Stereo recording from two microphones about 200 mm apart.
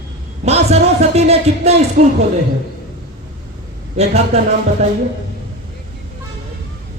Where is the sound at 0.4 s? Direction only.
30° right (ahead or behind).